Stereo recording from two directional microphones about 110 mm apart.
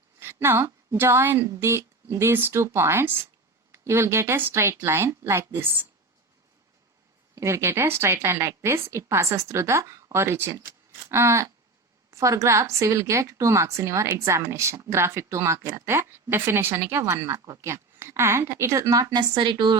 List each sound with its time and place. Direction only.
0.2 s a woman's voice: 20° right (ahead or behind)
7.3 s a woman's voice: 25° right (ahead or behind); by 19.8 s 45° right (ahead or behind)